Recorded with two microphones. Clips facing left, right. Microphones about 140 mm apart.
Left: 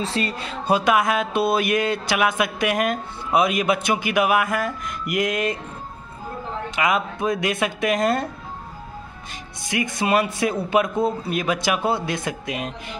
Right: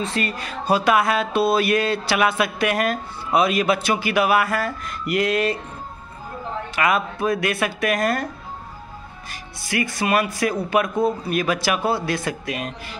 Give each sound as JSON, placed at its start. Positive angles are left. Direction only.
{"t": 0.0, "sound": "music", "side_deg": 30}
{"t": 6.7, "sound": "speech", "side_deg": 20}
{"t": 9.3, "sound": "speech", "side_deg": 20}